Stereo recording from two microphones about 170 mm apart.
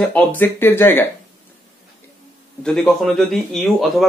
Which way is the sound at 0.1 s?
10° left (ahead or behind).